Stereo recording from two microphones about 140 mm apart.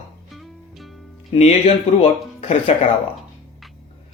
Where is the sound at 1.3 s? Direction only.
50° left (ahead or behind).